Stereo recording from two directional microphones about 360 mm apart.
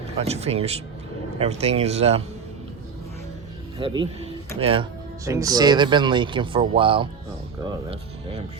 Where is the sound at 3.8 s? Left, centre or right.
Centre.